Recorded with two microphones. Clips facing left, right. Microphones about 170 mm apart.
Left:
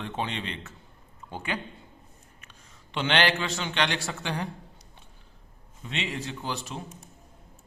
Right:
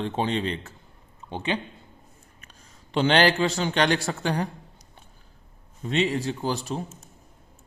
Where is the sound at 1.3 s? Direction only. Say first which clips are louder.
Right 5 dB; 20° right (ahead or behind).